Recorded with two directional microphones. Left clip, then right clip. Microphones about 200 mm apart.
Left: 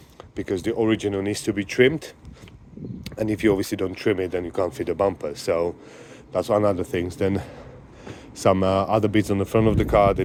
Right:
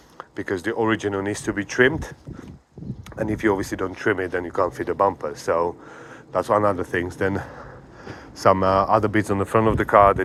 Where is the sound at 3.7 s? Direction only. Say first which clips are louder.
Even; 45° left (ahead or behind).